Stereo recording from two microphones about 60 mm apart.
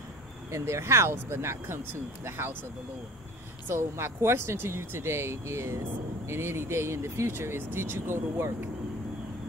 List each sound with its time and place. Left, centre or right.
0.5 s speech: right
3.6 s speech: right